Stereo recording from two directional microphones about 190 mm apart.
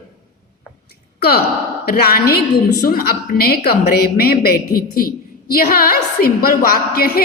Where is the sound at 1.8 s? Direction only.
55° left (ahead or behind).